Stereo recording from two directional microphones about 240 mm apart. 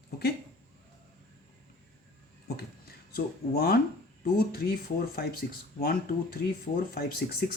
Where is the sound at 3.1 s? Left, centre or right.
Left.